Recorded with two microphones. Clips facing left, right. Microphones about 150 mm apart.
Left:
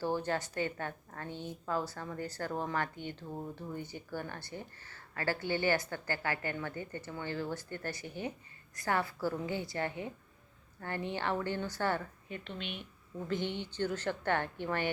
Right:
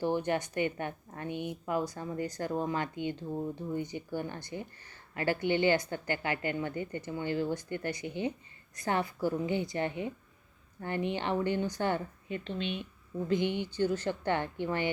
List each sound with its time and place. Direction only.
0.0 s a woman's voice: 15° right (ahead or behind)